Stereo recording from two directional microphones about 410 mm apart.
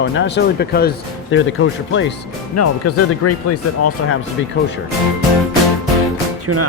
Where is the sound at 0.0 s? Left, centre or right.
Left.